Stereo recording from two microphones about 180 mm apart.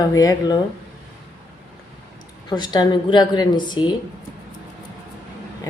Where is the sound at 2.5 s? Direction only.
25° left (ahead or behind).